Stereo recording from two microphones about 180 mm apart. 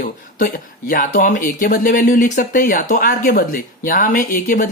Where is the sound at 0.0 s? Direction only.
50° left (ahead or behind).